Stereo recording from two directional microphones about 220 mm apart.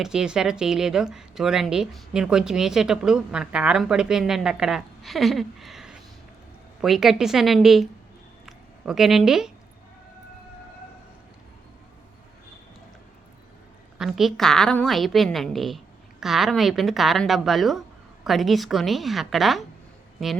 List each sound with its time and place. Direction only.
0.0 s speech: 5° right (ahead or behind)
14.0 s speech: centre (ahead or behind)